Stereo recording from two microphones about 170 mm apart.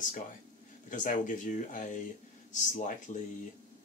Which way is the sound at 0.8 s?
50° left (ahead or behind).